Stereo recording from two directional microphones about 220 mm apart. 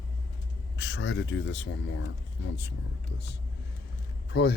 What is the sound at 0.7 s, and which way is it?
Speech, 55° left (ahead or behind).